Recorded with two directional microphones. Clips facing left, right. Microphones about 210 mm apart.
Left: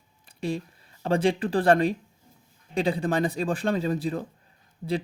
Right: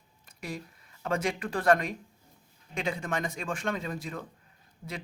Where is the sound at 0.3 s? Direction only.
30° left (ahead or behind).